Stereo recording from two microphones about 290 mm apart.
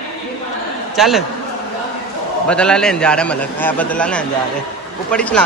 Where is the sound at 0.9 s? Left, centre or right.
Centre.